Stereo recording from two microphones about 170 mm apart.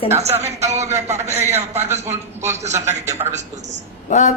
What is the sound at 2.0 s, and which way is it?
Speech, 40° right (ahead or behind).